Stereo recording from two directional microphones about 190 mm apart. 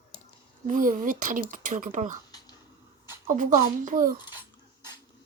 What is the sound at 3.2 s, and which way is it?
Speech, 40° right (ahead or behind).